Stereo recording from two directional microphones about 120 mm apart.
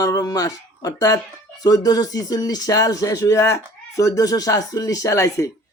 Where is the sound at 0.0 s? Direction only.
30° left (ahead or behind).